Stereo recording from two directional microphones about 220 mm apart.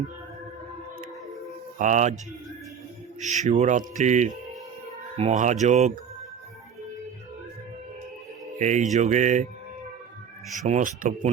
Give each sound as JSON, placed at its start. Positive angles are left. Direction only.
{"t": 1.8, "sound": "speech", "side_deg": -35}
{"t": 3.2, "sound": "speech", "side_deg": -35}
{"t": 8.5, "sound": "speech", "side_deg": -35}
{"t": 10.5, "sound": "speech", "side_deg": -35}